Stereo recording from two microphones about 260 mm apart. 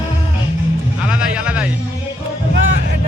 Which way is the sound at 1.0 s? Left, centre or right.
Centre.